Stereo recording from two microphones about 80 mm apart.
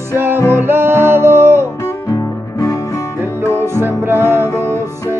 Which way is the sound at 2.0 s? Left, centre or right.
Left.